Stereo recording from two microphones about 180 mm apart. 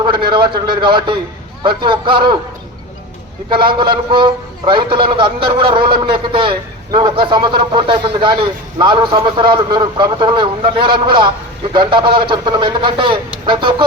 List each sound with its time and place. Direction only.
0.3 s a man's voice: 25° right (ahead or behind)
4.1 s a man's voice: 25° right (ahead or behind)